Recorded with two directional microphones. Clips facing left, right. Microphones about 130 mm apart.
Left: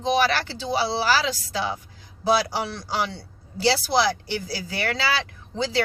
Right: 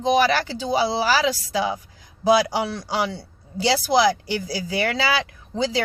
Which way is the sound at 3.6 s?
15° right (ahead or behind).